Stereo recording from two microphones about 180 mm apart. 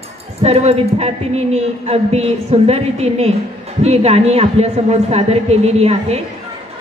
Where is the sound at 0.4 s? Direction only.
35° right (ahead or behind).